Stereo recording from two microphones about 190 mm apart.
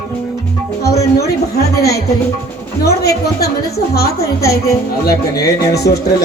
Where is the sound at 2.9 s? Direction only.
55° left (ahead or behind).